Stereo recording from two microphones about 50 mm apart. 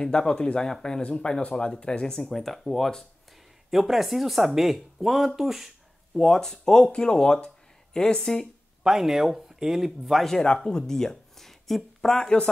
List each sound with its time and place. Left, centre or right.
0.0 s speech: centre
8.8 s speech: centre
10.4 s speech: centre